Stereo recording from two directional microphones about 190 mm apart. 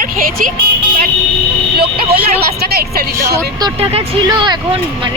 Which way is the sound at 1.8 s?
50° right (ahead or behind).